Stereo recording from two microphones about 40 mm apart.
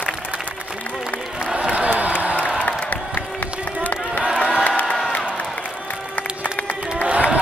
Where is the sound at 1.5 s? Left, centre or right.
Right.